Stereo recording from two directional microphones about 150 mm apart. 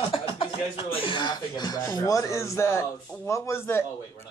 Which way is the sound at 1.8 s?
20° left (ahead or behind).